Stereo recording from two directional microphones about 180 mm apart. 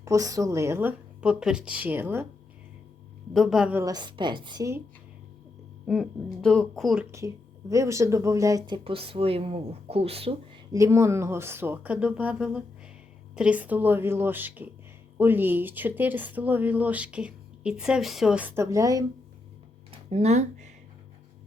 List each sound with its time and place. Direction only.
0.0 s speech: 20° right (ahead or behind)
3.3 s a woman's voice: centre (ahead or behind)
3.8 s speech: 25° right (ahead or behind)
5.8 s a woman's voice: centre (ahead or behind)
7.2 s speech: 15° right (ahead or behind)
10.7 s speech: 15° right (ahead or behind)
19.9 s a sound: 35° right (ahead or behind)